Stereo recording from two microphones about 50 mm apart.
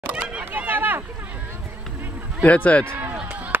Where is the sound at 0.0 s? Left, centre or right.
Right.